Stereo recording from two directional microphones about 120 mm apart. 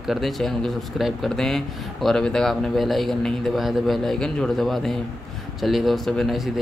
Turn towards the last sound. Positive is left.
turn(degrees=0)  # may be behind; listen again after turning